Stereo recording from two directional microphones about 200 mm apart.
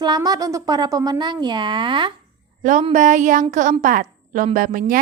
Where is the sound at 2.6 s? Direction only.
40° right (ahead or behind).